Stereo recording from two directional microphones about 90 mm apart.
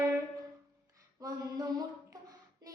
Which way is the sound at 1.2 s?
45° right (ahead or behind).